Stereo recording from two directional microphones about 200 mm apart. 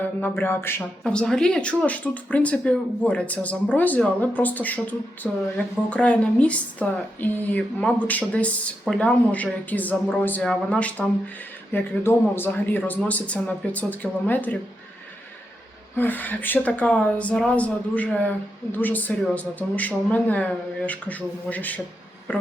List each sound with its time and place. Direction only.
0.0 s speech: 10° left (ahead or behind)
16.0 s speech: 10° left (ahead or behind)